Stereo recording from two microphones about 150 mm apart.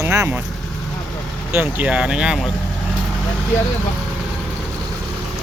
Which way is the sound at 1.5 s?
10° right (ahead or behind).